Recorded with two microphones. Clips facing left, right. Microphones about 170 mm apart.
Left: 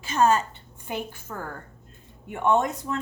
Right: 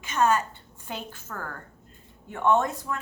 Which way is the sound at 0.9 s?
15° left (ahead or behind).